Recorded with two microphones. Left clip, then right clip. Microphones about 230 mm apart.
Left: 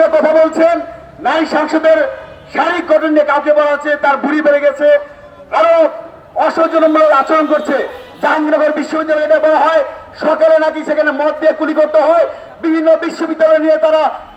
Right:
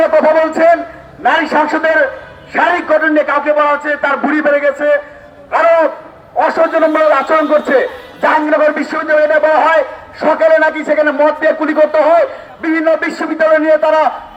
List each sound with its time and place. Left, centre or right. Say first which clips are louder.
0.0 s a man's voice: left 1 dB; right